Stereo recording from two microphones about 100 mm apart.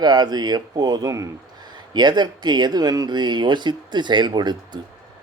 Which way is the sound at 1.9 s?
45° right (ahead or behind).